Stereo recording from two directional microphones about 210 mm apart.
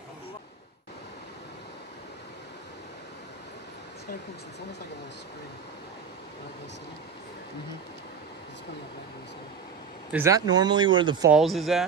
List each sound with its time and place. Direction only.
10.1 s speech: 15° right (ahead or behind)
11.2 s speech: centre (ahead or behind)